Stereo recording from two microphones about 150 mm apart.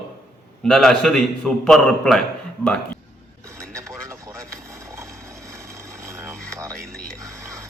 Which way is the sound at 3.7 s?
20° right (ahead or behind).